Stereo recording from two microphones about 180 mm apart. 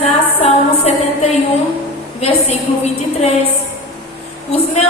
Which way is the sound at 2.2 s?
35° left (ahead or behind).